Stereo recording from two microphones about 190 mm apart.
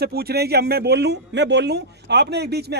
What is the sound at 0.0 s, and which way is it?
Speech, 55° right (ahead or behind).